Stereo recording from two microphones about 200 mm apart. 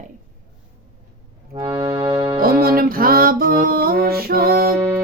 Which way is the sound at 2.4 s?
50° right (ahead or behind).